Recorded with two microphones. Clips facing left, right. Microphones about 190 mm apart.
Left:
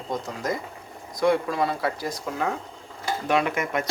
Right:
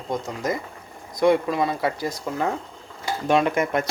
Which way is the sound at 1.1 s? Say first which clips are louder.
Right 3 dB; 20° right (ahead or behind).